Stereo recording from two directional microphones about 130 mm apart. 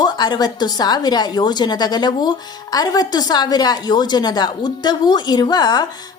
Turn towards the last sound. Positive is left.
turn(degrees=30)  # may be behind; listen again after turning